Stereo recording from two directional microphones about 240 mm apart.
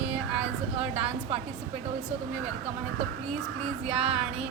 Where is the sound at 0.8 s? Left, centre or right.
Right.